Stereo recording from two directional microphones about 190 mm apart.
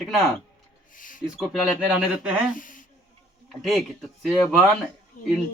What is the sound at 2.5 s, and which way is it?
Speech, 45° left (ahead or behind).